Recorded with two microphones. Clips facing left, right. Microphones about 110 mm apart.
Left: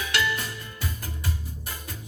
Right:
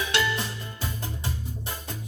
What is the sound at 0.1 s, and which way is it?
Music, 25° right (ahead or behind).